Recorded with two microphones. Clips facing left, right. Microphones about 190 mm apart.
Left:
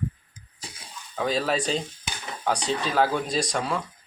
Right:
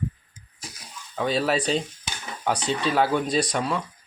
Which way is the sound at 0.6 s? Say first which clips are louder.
Right 1 dB; 30° left (ahead or behind).